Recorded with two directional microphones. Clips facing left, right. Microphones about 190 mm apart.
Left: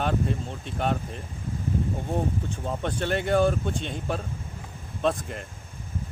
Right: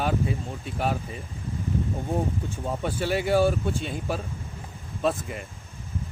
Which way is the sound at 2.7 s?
5° right (ahead or behind).